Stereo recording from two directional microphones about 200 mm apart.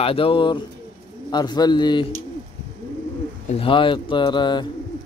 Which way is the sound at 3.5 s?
25° left (ahead or behind).